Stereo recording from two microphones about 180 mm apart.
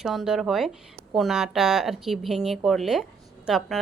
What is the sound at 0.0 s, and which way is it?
A woman's voice, centre (ahead or behind).